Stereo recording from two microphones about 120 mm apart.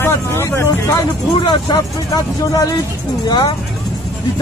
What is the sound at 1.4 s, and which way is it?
Speech, 35° left (ahead or behind).